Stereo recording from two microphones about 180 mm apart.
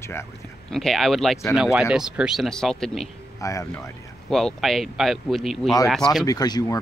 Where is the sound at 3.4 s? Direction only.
20° left (ahead or behind).